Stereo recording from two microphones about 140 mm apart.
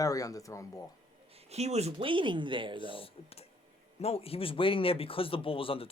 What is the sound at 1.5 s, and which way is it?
Speech, 50° right (ahead or behind).